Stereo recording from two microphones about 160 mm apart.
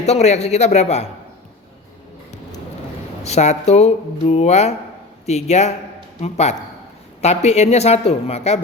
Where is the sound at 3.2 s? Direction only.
45° left (ahead or behind).